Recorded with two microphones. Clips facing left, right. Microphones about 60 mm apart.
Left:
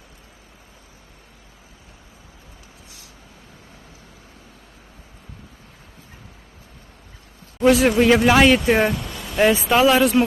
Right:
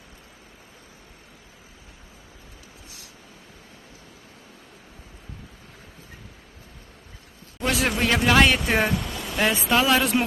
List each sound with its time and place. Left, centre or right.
7.7 s speech: centre